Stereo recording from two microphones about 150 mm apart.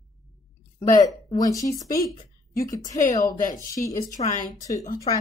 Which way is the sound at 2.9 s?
55° left (ahead or behind).